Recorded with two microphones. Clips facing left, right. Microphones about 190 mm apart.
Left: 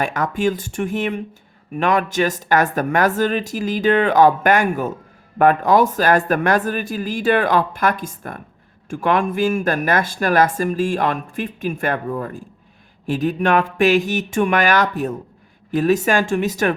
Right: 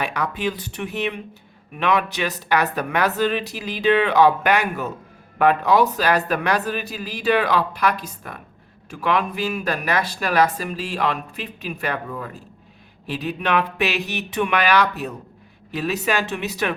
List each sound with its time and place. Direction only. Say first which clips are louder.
0.0 s speech: left 5 dB; 45° left (ahead or behind)